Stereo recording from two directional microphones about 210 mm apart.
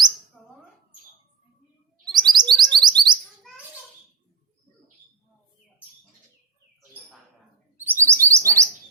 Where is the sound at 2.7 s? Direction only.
20° right (ahead or behind).